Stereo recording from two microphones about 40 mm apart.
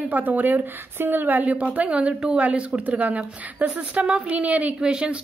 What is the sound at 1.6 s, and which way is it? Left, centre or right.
A woman's voice, right.